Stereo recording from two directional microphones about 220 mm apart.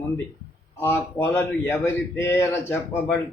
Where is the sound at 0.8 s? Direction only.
10° left (ahead or behind).